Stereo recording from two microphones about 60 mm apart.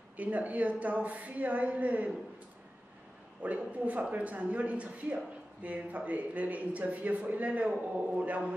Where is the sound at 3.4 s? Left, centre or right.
Right.